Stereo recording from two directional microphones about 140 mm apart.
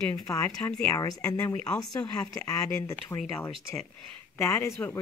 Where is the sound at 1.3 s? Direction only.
25° left (ahead or behind).